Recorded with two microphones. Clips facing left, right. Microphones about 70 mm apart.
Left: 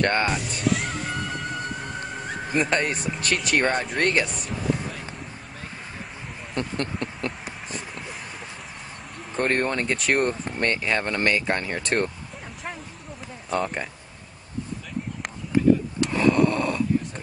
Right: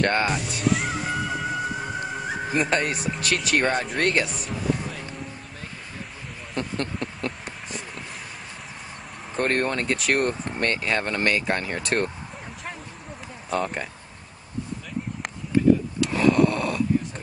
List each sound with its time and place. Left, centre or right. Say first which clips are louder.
0.0 s music: even; centre
6.5 s a sound: even; centre
9.3 s speech: even; centre
13.5 s speech: even; centre
16.1 s snoring: right 1 dB; centre